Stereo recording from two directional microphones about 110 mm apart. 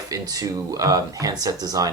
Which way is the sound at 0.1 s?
35° right (ahead or behind).